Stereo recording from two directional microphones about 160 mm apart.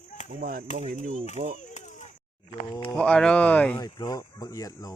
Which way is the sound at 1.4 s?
40° right (ahead or behind).